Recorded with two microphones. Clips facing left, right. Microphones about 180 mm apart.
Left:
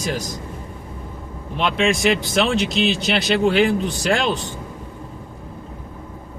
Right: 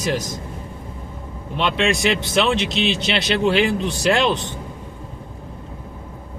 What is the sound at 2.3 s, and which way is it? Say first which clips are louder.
Speech: even; 45° left (ahead or behind).